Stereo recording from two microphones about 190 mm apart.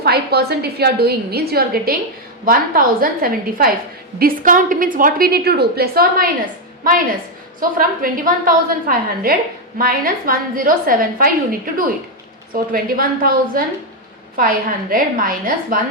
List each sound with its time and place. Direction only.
0.0 s a woman's voice: 55° right (ahead or behind)
7.6 s a woman's voice: 50° right (ahead or behind)